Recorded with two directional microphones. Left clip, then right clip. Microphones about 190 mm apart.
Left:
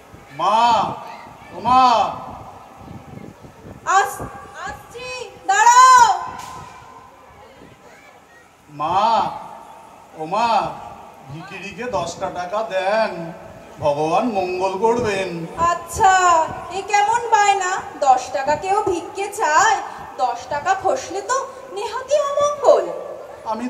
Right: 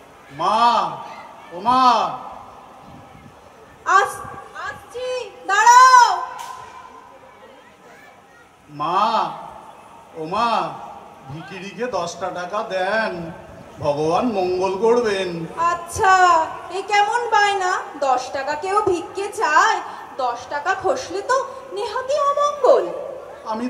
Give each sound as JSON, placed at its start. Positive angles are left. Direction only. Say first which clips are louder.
{"t": 0.4, "sound": "a woman's voice", "louder": "left 1 dB", "side_deg": 25}
{"t": 5.1, "sound": "child singing", "louder": "left 1 dB", "side_deg": 25}
{"t": 8.7, "sound": "a woman's voice", "louder": "left 2 dB", "side_deg": 25}
{"t": 10.2, "sound": "a woman's voice", "louder": "left 2 dB", "side_deg": 25}
{"t": 11.6, "sound": "a woman's voice", "louder": "even", "side_deg": 25}